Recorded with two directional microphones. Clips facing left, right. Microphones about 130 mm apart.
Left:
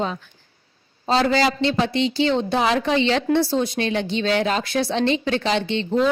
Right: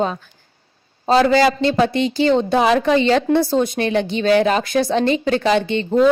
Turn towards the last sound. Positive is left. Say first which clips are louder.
# right 5 dB
turn(degrees=-50)  # may be behind; listen again after turning